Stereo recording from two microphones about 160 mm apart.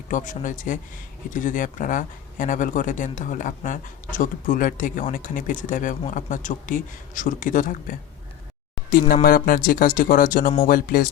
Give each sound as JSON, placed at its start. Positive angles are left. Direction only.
{"t": 0.1, "sound": "speech", "side_deg": 55}